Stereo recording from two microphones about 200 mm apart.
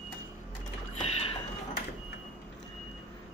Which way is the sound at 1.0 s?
30° left (ahead or behind).